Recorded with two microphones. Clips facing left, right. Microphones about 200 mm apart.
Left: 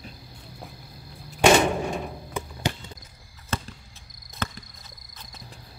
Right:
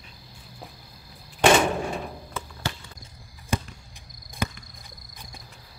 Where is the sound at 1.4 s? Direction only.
Centre (ahead or behind).